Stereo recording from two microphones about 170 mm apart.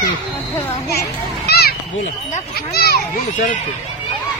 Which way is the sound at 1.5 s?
65° left (ahead or behind).